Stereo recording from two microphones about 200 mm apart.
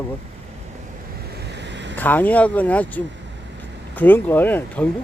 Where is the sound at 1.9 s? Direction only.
10° left (ahead or behind).